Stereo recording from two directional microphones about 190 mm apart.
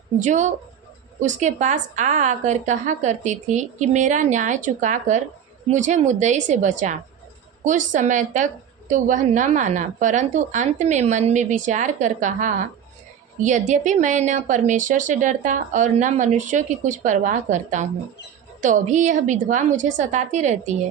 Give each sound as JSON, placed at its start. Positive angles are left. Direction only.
{"t": 0.2, "sound": "a woman's voice", "side_deg": -40}